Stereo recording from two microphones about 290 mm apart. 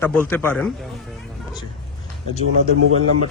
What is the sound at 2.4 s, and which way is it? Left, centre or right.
Speech, right.